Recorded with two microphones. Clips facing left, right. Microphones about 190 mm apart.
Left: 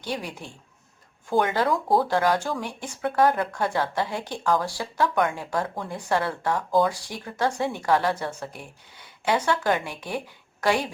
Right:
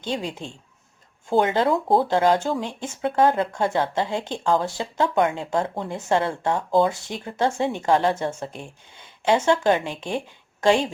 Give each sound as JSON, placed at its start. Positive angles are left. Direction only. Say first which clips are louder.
{"t": 0.0, "sound": "speech", "louder": "right 4 dB", "side_deg": -25}